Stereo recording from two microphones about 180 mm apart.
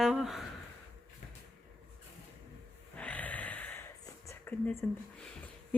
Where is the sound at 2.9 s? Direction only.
10° left (ahead or behind).